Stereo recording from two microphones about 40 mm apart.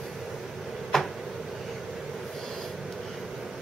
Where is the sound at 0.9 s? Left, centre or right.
Centre.